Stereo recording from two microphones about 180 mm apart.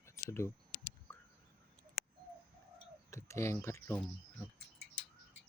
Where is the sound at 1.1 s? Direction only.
15° left (ahead or behind).